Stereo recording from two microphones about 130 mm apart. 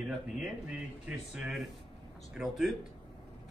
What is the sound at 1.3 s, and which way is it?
Speech, 5° right (ahead or behind).